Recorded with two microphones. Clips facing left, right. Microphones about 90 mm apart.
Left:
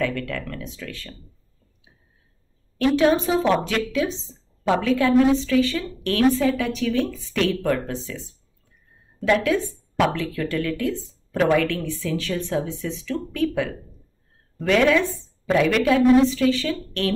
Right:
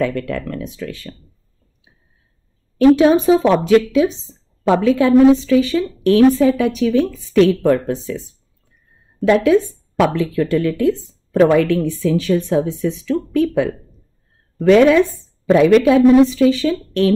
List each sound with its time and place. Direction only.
0.0 s a woman's voice: 20° right (ahead or behind)
3.0 s a woman's voice: 15° right (ahead or behind)
9.2 s a woman's voice: 20° right (ahead or behind)